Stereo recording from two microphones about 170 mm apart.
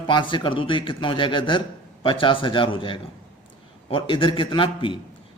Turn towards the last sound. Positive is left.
turn(degrees=30)  # may be behind; listen again after turning